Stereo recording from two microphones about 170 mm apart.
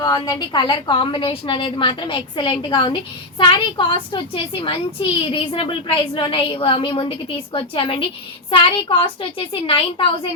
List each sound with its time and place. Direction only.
0.0 s a woman's voice: 25° left (ahead or behind)